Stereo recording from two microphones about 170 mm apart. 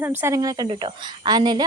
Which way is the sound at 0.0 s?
15° right (ahead or behind).